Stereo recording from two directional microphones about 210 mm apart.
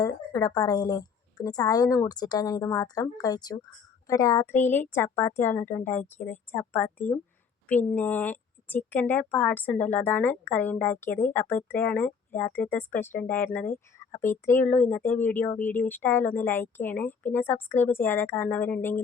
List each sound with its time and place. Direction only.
0.0 s a woman's voice: 15° left (ahead or behind)